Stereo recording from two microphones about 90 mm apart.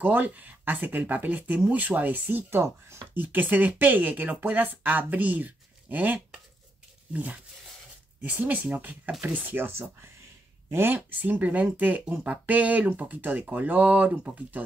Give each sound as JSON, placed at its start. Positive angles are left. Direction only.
{"t": 0.0, "sound": "speech", "side_deg": -20}